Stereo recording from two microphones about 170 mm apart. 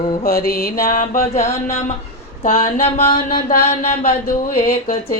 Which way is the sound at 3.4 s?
55° left (ahead or behind).